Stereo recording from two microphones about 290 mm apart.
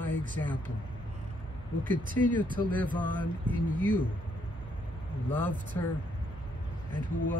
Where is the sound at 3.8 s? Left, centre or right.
Right.